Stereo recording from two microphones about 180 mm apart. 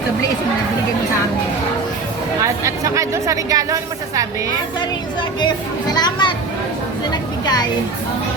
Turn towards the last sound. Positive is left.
turn(degrees=20)  # may be behind; listen again after turning